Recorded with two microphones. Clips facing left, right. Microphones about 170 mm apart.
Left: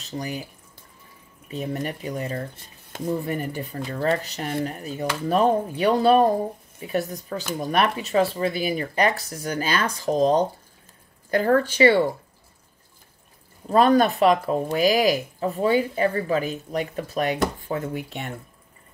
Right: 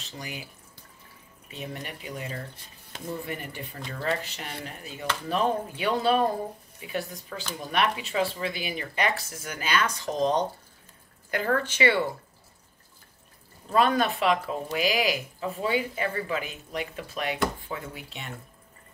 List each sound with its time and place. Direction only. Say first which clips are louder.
0.2 s speech: left 7 dB; 40° left (ahead or behind)
1.5 s speech: left 9 dB; 40° left (ahead or behind)
13.7 s speech: left 6 dB; 40° left (ahead or behind)